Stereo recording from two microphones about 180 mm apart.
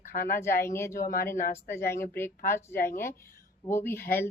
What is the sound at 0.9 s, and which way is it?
Speech, 50° left (ahead or behind).